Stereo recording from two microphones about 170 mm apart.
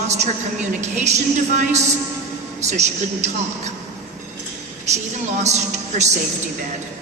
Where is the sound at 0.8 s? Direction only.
40° right (ahead or behind).